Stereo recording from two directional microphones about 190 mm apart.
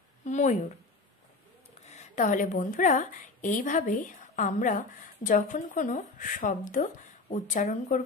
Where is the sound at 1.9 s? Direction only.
40° left (ahead or behind).